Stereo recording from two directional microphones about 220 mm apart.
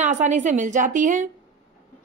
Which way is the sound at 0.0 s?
30° right (ahead or behind).